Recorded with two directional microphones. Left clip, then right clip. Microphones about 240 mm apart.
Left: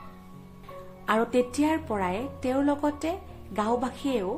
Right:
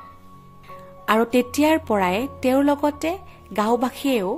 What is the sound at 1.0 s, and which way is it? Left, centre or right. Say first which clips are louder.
A woman's voice: right 5 dB; right.